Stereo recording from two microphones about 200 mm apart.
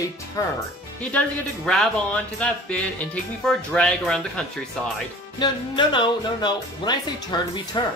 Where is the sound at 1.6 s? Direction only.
5° left (ahead or behind).